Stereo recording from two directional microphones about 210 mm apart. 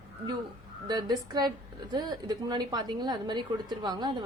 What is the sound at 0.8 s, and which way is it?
A woman's voice, 20° right (ahead or behind).